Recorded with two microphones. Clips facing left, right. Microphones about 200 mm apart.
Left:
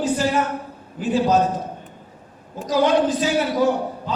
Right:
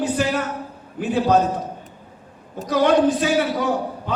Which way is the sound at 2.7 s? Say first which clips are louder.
Right 1 dB; 60° right (ahead or behind).